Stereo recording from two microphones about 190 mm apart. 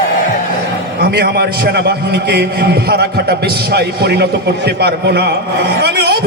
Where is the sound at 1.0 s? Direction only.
55° right (ahead or behind).